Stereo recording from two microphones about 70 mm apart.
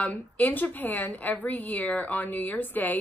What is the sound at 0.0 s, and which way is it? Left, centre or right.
A woman's voice, left.